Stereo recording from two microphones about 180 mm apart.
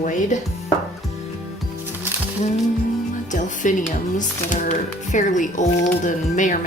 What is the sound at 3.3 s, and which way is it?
Speech, 45° left (ahead or behind).